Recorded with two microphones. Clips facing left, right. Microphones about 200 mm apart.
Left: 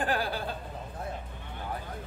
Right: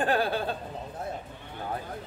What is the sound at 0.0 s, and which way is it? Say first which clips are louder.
Speech: right 4 dB; 25° right (ahead or behind).